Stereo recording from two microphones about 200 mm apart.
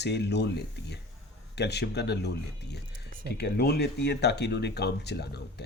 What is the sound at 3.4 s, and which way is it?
Speech, 50° left (ahead or behind).